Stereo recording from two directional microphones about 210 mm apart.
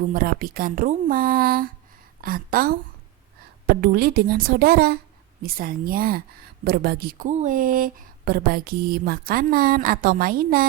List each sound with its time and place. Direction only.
0.0 s speech: 40° right (ahead or behind)
3.8 s speech: 45° right (ahead or behind)